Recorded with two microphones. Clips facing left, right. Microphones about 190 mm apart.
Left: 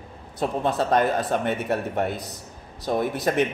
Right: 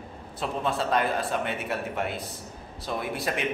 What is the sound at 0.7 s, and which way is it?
A man's voice, 40° left (ahead or behind).